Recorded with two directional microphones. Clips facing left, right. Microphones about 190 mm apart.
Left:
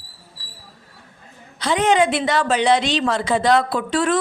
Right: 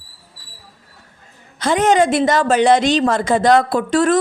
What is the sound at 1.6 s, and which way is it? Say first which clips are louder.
A woman's voice: right 3 dB; 45° right (ahead or behind).